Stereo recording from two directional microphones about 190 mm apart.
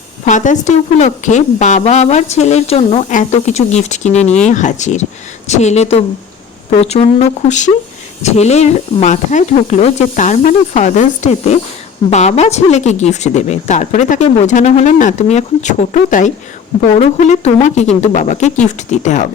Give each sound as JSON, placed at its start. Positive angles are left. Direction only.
{"t": 0.3, "sound": "speech", "side_deg": 40}